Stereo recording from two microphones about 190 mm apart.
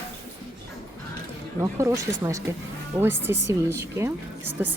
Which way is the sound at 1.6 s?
15° right (ahead or behind).